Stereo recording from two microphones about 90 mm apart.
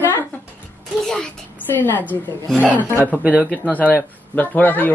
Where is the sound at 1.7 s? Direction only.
20° left (ahead or behind).